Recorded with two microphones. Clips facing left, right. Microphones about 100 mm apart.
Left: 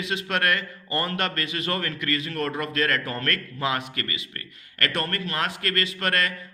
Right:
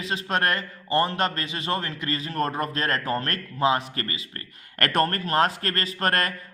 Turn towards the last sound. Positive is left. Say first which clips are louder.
# right 1 dB
turn(degrees=-40)  # may be behind; listen again after turning